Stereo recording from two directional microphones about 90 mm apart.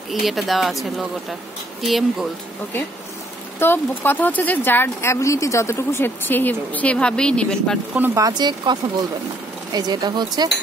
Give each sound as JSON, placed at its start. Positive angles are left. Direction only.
{"t": 0.1, "sound": "speech", "side_deg": 0}
{"t": 3.5, "sound": "speech", "side_deg": 25}
{"t": 8.3, "sound": "speech", "side_deg": -50}